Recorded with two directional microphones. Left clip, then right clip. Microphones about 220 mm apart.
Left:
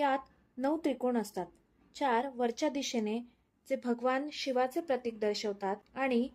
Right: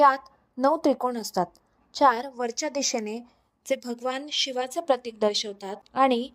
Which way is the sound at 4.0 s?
35° right (ahead or behind).